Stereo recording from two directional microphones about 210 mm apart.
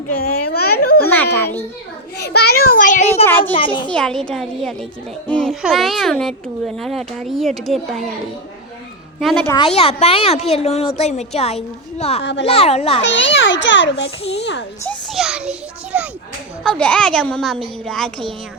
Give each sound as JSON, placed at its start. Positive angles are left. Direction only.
{"t": 0.2, "sound": "a sound", "side_deg": 45}
{"t": 1.1, "sound": "a sound", "side_deg": 10}
{"t": 2.1, "sound": "a child's voice", "side_deg": 50}
{"t": 3.8, "sound": "a child's voice", "side_deg": 5}
{"t": 9.2, "sound": "a child's voice", "side_deg": 0}
{"t": 9.5, "sound": "speech", "side_deg": 25}
{"t": 12.2, "sound": "a child's voice", "side_deg": 55}
{"t": 12.5, "sound": "speech", "side_deg": 30}
{"t": 13.0, "sound": "a child's voice", "side_deg": 60}
{"t": 14.8, "sound": "a child's voice", "side_deg": 0}
{"t": 16.6, "sound": "a child's voice", "side_deg": 5}